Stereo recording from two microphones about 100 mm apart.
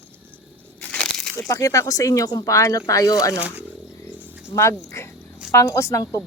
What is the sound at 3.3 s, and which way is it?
Speech, 15° right (ahead or behind).